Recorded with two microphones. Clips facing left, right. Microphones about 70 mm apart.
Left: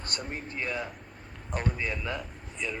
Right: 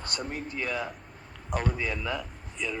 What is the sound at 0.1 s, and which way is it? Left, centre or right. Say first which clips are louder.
Speech: right 2 dB; left.